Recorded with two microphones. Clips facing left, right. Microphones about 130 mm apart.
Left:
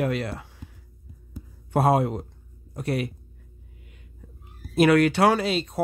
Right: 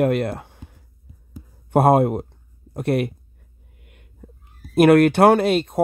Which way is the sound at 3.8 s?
55° right (ahead or behind).